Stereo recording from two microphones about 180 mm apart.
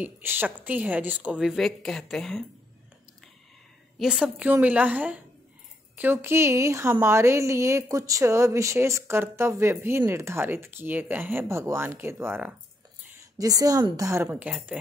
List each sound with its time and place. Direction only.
0.0 s a woman's voice: 10° right (ahead or behind)
4.0 s a woman's voice: centre (ahead or behind)